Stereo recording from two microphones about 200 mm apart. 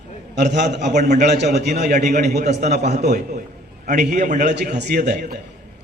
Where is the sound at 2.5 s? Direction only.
55° right (ahead or behind).